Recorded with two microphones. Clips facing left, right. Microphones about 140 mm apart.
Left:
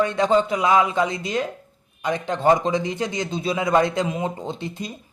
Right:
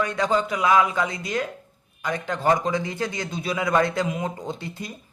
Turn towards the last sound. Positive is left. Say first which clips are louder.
# left 3 dB
turn(degrees=20)  # may be behind; listen again after turning